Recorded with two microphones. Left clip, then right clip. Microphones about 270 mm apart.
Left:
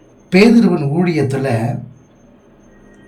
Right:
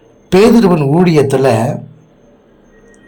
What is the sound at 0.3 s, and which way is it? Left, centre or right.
Speech, centre.